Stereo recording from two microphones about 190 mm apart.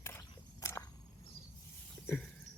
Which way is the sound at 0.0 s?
15° left (ahead or behind).